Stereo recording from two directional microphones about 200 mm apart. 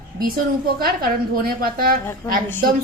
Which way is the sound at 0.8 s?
50° right (ahead or behind).